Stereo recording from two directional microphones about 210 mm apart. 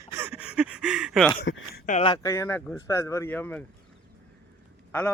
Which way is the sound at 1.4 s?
60° left (ahead or behind).